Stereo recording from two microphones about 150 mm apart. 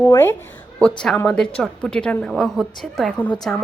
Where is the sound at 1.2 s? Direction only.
5° left (ahead or behind).